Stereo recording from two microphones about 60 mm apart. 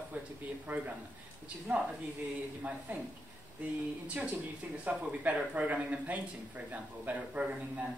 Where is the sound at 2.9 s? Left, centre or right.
Right.